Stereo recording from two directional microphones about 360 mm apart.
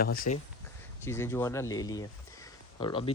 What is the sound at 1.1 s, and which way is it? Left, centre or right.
Speech, centre.